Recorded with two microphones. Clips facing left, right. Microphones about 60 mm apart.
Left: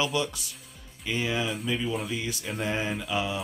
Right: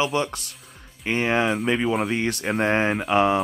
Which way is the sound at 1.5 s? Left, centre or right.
Right.